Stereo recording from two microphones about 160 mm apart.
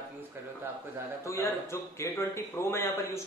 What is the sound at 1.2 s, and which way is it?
A man's voice, 20° left (ahead or behind).